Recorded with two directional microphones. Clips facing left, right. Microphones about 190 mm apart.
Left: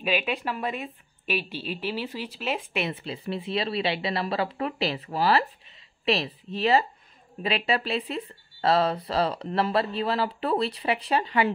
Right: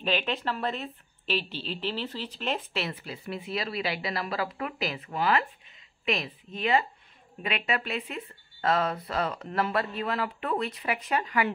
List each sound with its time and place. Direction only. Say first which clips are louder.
0.0 s a woman's voice: left 2 dB; 10° left (ahead or behind); by 11.5 s 30° left (ahead or behind)